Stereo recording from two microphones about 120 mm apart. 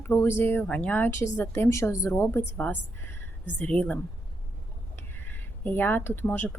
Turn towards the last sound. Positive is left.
turn(degrees=15)  # may be behind; listen again after turning